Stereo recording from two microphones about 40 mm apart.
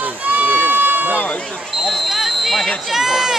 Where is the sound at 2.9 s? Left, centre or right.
Centre.